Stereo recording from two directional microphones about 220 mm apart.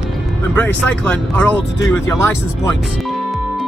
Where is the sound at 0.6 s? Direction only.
5° left (ahead or behind).